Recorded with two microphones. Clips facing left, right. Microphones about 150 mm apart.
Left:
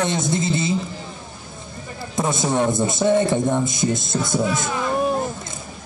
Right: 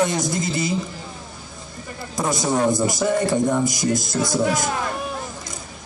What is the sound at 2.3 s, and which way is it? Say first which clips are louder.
A man's voice: right 1 dB; 25° left (ahead or behind).